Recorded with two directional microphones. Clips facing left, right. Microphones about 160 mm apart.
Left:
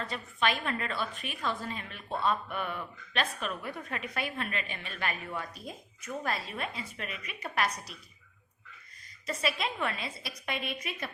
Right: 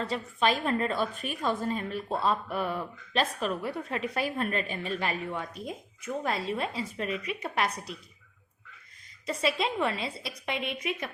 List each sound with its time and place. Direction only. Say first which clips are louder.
0.1 s a woman's voice: right 3 dB; 35° right (ahead or behind)
9.2 s a woman's voice: right 4 dB; 25° right (ahead or behind)